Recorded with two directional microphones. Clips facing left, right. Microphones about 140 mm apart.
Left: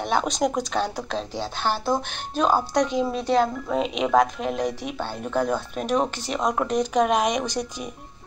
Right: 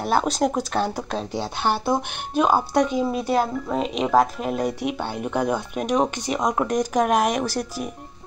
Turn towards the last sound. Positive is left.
turn(degrees=-5)  # may be behind; listen again after turning